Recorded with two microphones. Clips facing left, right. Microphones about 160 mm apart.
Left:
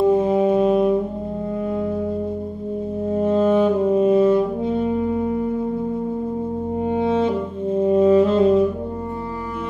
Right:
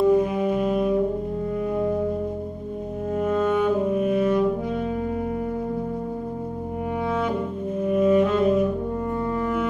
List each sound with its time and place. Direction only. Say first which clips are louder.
0.0 s brass instrument: left 3 dB; 25° left (ahead or behind)
3.2 s saxophone: left 5 dB; 30° left (ahead or behind)
7.0 s music: left 6 dB; 25° left (ahead or behind)
7.8 s brass instrument: left 4 dB; 30° left (ahead or behind)